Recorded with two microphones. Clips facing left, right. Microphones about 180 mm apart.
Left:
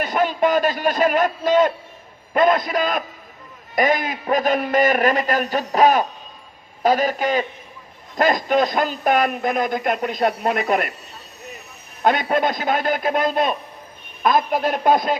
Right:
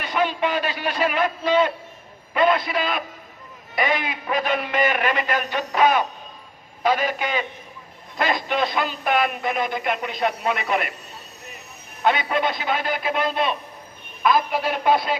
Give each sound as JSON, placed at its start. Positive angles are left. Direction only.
{"t": 0.0, "sound": "a man's voice", "side_deg": 45}
{"t": 12.0, "sound": "speech", "side_deg": 45}